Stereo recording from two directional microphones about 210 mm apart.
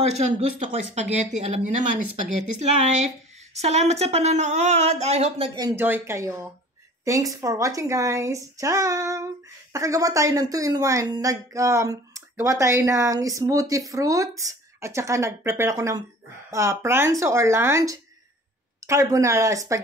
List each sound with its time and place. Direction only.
0.0 s speech: 30° right (ahead or behind)
5.6 s speech: 15° right (ahead or behind)